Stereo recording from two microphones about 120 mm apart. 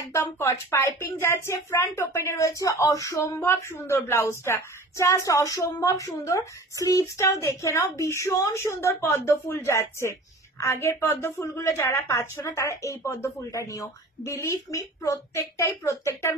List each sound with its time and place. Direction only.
0.1 s a woman's voice: 25° left (ahead or behind)